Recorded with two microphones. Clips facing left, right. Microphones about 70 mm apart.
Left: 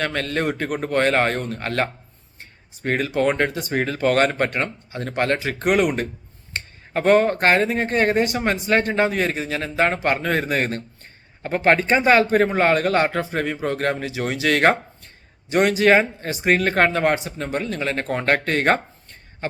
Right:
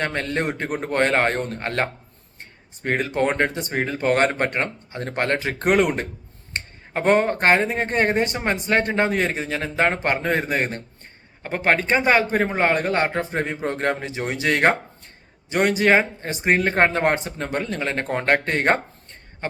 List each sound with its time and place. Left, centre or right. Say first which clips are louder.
0.0 s speech: left 1 dB; right
11.9 s a man's voice: left 3 dB; right
17.0 s speech: left 1 dB; right